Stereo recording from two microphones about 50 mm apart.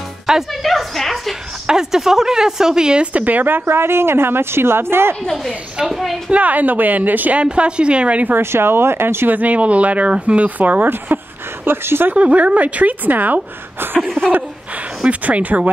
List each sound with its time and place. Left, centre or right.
0.3 s speech: centre
0.6 s a sound: centre
1.7 s speech: centre; by 5.1 s right
5.2 s a woman's voice: centre
6.3 s speech: right
7.4 s speech: centre
8.4 s speech: right
9.3 s speech: right
11.1 s speech: right
12.1 s speech: right
14.0 s speech: centre
15.0 s speech: right